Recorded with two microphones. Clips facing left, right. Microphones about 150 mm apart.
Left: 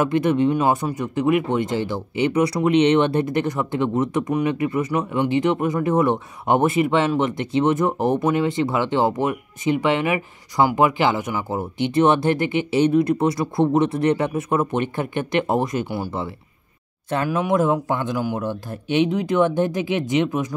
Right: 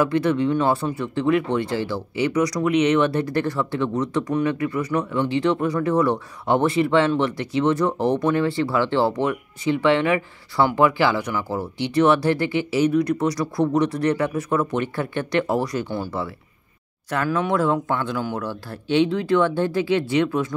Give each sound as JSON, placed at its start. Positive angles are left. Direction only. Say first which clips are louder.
{"t": 0.0, "sound": "speech", "louder": "left 1 dB", "side_deg": 20}